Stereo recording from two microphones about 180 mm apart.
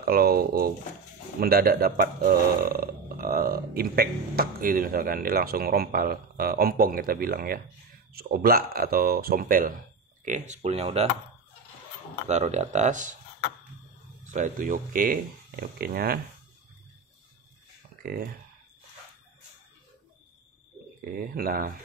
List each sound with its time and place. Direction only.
0.0 s speech: 55° right (ahead or behind)
10.2 s speech: 40° right (ahead or behind)
12.3 s speech: 40° right (ahead or behind)
14.2 s speech: 45° right (ahead or behind)
18.0 s speech: 55° right (ahead or behind)
21.0 s speech: 50° right (ahead or behind)